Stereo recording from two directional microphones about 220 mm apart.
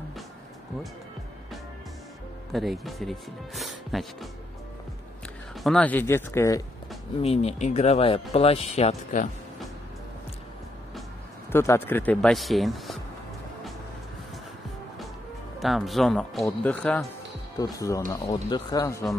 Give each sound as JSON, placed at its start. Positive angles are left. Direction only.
{"t": 2.5, "sound": "speech", "side_deg": 0}
{"t": 5.6, "sound": "speech", "side_deg": 5}
{"t": 7.2, "sound": "speech", "side_deg": 30}
{"t": 11.5, "sound": "speech", "side_deg": 10}
{"t": 15.6, "sound": "speech", "side_deg": 0}